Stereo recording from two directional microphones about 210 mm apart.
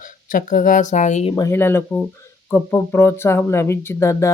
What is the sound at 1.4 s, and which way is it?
Speech, 10° left (ahead or behind).